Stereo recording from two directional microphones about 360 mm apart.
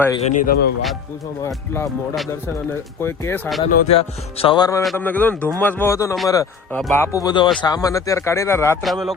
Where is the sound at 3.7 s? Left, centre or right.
Centre.